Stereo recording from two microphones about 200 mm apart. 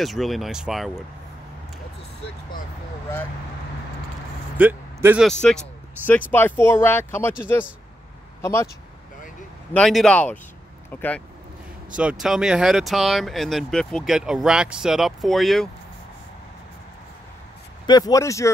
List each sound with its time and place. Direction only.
0.0 s speech: centre (ahead or behind)
4.6 s speech: 10° right (ahead or behind)
5.4 s speech: 5° left (ahead or behind)
9.8 s speech: 5° left (ahead or behind)
12.0 s speech: 5° right (ahead or behind)
17.8 s speech: 20° left (ahead or behind)